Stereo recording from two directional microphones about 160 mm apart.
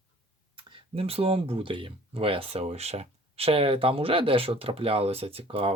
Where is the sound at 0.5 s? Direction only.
35° right (ahead or behind).